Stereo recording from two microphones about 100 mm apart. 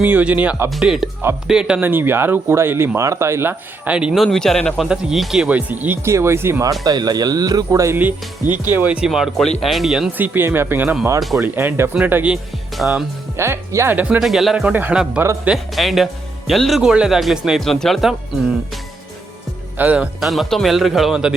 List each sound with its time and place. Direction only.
0.0 s speech: 15° right (ahead or behind)
1.8 s speech: 20° right (ahead or behind)
3.8 s speech: 10° right (ahead or behind)
6.1 s speech: 25° right (ahead or behind)
6.8 s speech: 40° right (ahead or behind)
7.9 s speech: 20° right (ahead or behind); by 10.1 s centre (ahead or behind)
10.1 s speech: 20° right (ahead or behind)
12.7 s speech: centre (ahead or behind)
13.3 s speech: 25° right (ahead or behind)
14.2 s speech: centre (ahead or behind)
14.7 s speech: 20° right (ahead or behind)
15.4 s speech: centre (ahead or behind)
19.7 s speech: 15° right (ahead or behind)
20.1 s speech: centre (ahead or behind)